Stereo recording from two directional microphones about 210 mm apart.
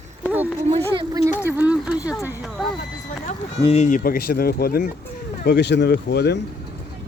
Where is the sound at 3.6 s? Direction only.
30° left (ahead or behind); by 6.4 s 50° left (ahead or behind).